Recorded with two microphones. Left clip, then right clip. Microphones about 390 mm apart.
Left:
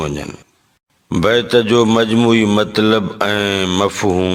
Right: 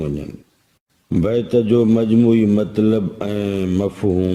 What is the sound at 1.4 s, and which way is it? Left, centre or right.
A man's voice, left.